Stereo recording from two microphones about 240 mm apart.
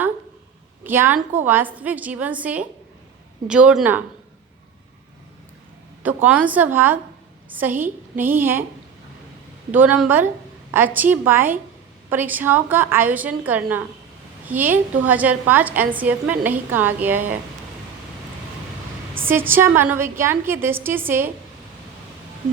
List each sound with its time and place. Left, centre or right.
0.9 s a woman's voice: centre
6.0 s a woman's voice: centre
9.7 s a woman's voice: centre
19.2 s a woman's voice: centre